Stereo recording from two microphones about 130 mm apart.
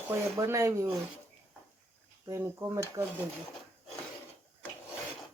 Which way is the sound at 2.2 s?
20° right (ahead or behind).